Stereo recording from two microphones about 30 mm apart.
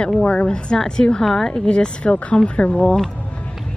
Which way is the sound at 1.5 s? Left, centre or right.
Left.